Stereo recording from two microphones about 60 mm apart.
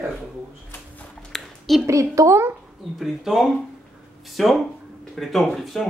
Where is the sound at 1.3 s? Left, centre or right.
Centre.